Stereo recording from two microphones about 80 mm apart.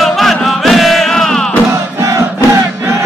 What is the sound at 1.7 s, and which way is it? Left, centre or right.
Crowd, right.